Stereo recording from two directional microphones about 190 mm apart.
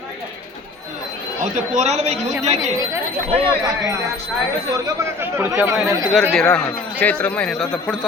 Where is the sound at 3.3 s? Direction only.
30° right (ahead or behind).